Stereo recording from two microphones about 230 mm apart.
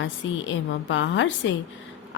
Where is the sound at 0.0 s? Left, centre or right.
Left.